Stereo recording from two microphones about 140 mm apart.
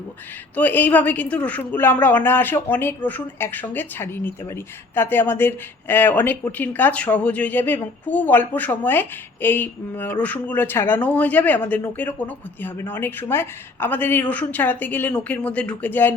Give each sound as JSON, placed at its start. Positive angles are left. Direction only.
{"t": 0.5, "sound": "speech", "side_deg": 10}